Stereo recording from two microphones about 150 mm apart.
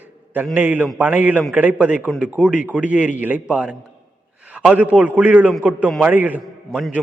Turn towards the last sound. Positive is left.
turn(degrees=-5)  # may be behind; listen again after turning